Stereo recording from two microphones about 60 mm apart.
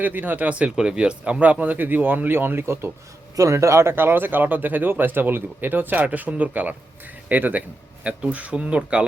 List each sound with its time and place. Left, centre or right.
0.0 s speech: right
3.3 s speech: right; by 9.0 s centre